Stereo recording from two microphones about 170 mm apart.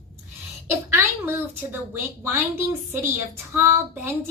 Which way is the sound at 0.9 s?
15° right (ahead or behind).